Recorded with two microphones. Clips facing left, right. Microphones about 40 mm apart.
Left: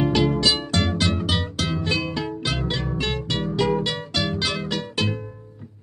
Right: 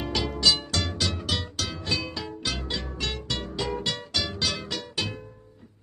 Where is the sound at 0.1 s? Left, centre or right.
Left.